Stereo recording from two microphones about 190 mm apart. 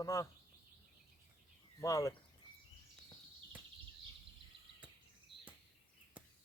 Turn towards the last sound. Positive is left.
turn(degrees=-5)  # may be behind; listen again after turning